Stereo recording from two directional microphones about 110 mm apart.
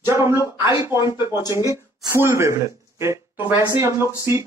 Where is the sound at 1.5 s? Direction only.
25° right (ahead or behind).